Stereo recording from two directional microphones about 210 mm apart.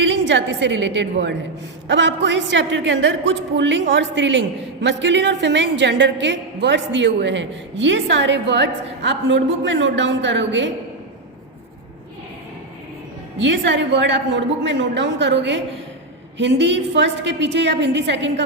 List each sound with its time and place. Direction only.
0.0 s a woman's voice: 60° right (ahead or behind)
13.4 s a woman's voice: 60° right (ahead or behind)